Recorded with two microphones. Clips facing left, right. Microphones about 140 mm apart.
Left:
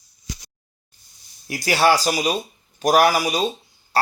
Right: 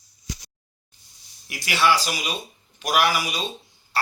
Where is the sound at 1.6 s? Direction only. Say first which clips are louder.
Left 4 dB; 40° left (ahead or behind).